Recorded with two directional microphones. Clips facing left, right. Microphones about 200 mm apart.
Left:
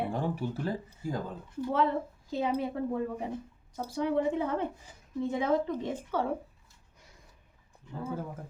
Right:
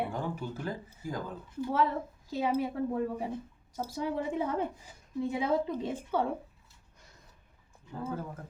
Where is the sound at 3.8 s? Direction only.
10° right (ahead or behind).